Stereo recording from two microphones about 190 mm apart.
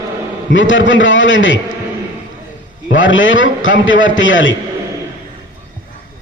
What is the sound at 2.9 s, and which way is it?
A man's voice, 80° left.